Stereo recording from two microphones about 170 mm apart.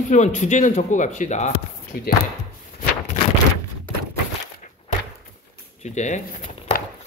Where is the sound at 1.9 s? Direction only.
65° left (ahead or behind).